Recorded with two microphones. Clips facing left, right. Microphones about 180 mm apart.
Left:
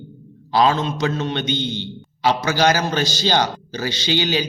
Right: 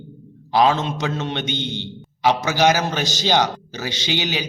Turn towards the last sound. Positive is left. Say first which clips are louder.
# left 4 dB
turn(degrees=-15)  # may be behind; listen again after turning